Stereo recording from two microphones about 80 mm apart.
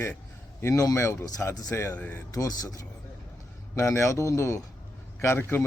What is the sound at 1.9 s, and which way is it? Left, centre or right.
Speech, centre.